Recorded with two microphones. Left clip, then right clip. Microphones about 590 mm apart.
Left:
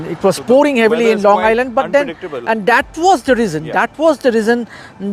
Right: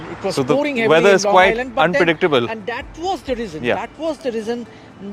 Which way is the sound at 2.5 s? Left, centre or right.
Left.